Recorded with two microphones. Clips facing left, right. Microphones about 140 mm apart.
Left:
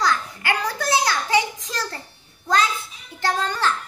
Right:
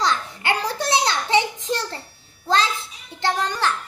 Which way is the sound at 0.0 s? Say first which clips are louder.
Even; 25° right (ahead or behind).